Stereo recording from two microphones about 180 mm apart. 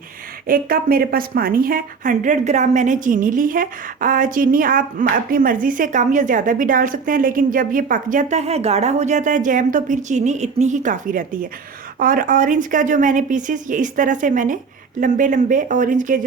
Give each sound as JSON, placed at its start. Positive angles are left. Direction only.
{"t": 0.4, "sound": "a woman's voice", "side_deg": -55}